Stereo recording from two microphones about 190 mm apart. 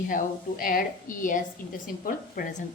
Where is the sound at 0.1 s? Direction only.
45° left (ahead or behind).